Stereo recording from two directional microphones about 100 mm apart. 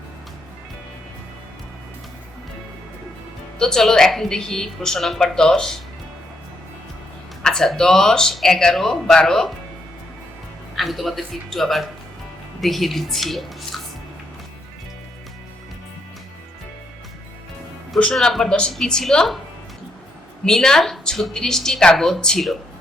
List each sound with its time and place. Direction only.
3.6 s a woman's voice: 5° left (ahead or behind)
7.4 s a woman's voice: 5° left (ahead or behind)
10.8 s a woman's voice: centre (ahead or behind)
17.9 s a woman's voice: 5° left (ahead or behind)
20.4 s a woman's voice: 5° left (ahead or behind)